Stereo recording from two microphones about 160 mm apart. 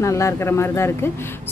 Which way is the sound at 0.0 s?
20° left (ahead or behind).